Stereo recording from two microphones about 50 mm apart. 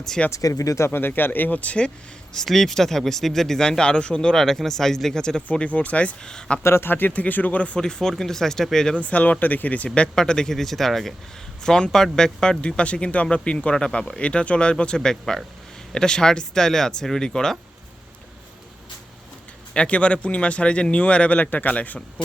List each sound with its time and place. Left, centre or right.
0.3 s speech: left
0.9 s speech: left
2.3 s speech: centre
5.5 s speech: left
6.2 s speech: centre
6.6 s speech: left
6.9 s speech: left
7.8 s speech: centre
9.0 s speech: left
10.2 s speech: centre
14.2 s speech: left
19.7 s speech: left